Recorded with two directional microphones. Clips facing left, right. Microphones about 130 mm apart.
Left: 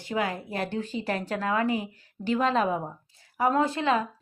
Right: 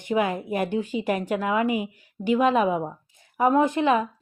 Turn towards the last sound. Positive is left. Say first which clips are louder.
# right 4 dB
turn(degrees=-20)  # may be behind; listen again after turning